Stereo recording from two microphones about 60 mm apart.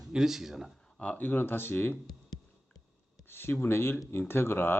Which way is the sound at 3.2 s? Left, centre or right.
Left.